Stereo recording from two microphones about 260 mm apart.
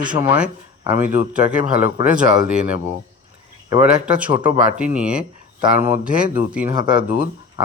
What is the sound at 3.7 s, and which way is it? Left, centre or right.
Speech, centre.